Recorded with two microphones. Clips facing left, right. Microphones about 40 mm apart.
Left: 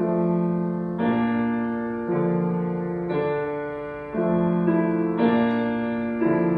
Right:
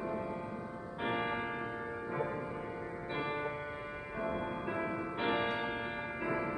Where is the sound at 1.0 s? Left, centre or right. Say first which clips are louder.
Left 11 dB; centre.